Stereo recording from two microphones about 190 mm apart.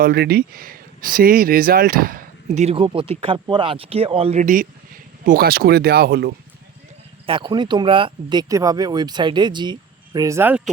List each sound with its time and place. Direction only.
0.0 s speech: 55° right (ahead or behind); by 4.4 s 30° right (ahead or behind)
4.4 s speech: 45° right (ahead or behind)
7.3 s speech: 25° right (ahead or behind)